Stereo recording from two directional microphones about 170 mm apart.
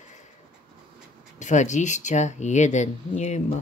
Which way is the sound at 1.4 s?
45° left (ahead or behind).